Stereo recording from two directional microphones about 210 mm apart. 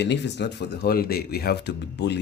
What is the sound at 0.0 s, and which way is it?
Speech, 55° left (ahead or behind).